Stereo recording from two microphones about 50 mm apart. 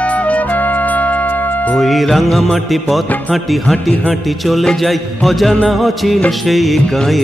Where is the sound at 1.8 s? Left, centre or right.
Centre.